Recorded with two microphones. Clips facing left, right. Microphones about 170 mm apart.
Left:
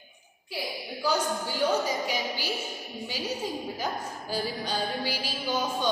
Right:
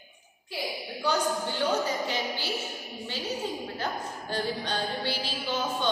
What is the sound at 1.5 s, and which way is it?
Speech, 10° left (ahead or behind).